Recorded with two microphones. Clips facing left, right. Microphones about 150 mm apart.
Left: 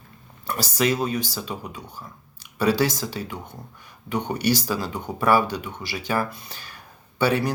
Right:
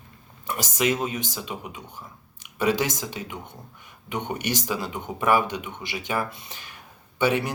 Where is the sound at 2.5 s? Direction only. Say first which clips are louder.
Left 2 dB; 20° right (ahead or behind).